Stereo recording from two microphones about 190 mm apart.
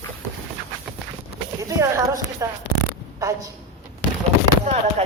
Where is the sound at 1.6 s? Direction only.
15° right (ahead or behind).